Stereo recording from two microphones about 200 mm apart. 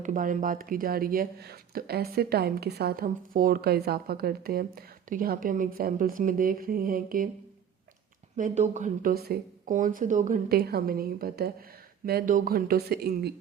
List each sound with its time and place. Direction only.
0.0 s speech: 40° right (ahead or behind)
8.4 s speech: 35° right (ahead or behind)